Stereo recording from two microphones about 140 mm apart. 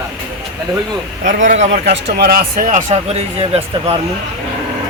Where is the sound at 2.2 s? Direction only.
90° right.